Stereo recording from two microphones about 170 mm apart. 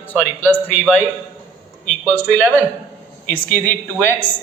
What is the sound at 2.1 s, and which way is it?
Speech, 10° left (ahead or behind).